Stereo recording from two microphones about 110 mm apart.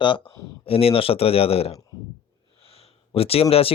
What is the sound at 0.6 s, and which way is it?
Speech, 60° left (ahead or behind).